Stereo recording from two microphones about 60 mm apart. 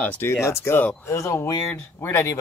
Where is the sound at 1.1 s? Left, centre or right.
Left.